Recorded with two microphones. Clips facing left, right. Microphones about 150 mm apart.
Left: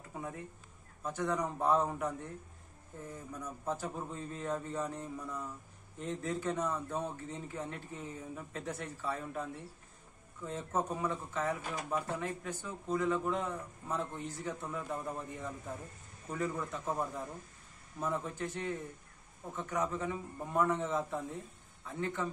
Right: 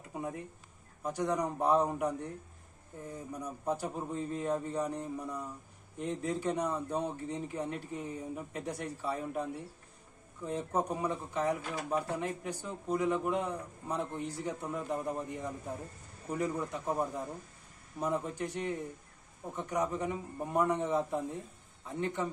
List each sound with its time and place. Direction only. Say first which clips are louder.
0.1 s a sound: right 4 dB; 20° right (ahead or behind)
1.0 s speech: right 2 dB; 15° right (ahead or behind)
3.3 s a man's voice: right 4 dB; 15° right (ahead or behind)